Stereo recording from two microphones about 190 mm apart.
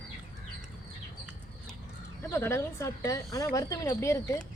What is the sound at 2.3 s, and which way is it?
Speech, 15° left (ahead or behind).